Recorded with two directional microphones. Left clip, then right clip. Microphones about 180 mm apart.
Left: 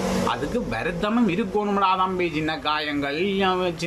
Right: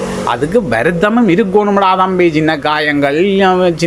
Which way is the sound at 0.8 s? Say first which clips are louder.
Right 12 dB; 35° right (ahead or behind).